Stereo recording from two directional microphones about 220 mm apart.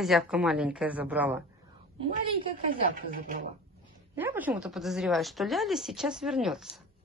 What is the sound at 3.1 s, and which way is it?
Speech, 40° right (ahead or behind).